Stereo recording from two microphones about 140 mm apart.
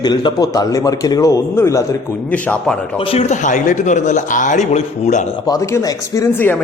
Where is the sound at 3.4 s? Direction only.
65° left (ahead or behind).